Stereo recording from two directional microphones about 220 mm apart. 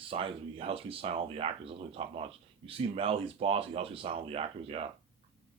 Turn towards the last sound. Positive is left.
turn(degrees=-25)  # may be behind; listen again after turning